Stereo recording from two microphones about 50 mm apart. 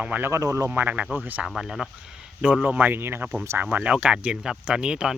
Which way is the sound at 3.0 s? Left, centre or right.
Right.